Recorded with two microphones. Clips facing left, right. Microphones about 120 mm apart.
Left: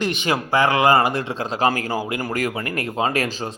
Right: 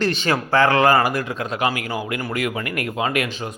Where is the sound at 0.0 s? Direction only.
15° left (ahead or behind).